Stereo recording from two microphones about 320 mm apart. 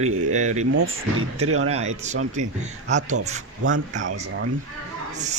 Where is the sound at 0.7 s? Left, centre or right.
Right.